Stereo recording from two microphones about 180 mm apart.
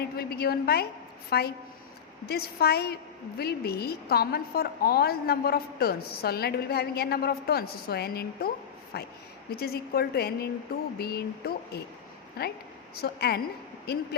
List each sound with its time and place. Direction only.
0.2 s a woman's voice: 60° left (ahead or behind)